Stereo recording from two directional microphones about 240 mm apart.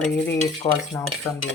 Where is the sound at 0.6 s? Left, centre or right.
Left.